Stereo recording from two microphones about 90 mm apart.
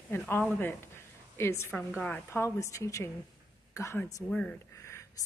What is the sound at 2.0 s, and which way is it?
Speech, 15° left (ahead or behind).